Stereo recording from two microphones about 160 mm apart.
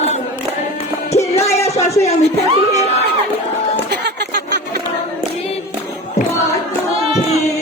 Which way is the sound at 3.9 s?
90° right.